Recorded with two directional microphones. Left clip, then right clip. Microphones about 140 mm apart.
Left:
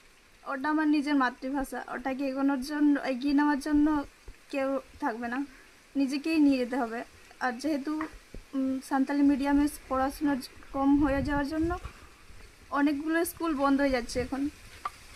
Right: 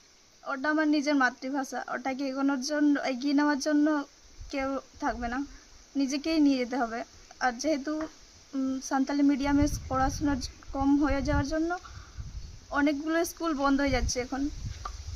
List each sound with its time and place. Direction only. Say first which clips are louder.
0.4 s speech: right 1 dB; 15° right (ahead or behind)